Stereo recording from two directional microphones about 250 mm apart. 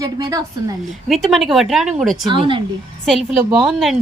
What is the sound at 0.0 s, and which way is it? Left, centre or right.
Speech, centre.